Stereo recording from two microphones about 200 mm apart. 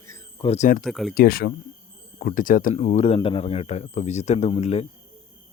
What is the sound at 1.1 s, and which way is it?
Speech, 50° left (ahead or behind).